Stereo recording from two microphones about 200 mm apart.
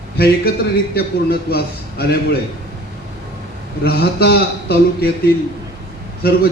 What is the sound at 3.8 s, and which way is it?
Speech, 50° left (ahead or behind).